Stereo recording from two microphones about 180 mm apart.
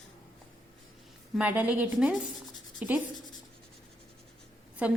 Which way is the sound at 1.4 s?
10° right (ahead or behind).